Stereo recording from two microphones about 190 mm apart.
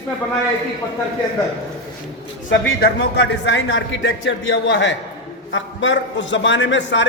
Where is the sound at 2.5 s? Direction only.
65° left (ahead or behind).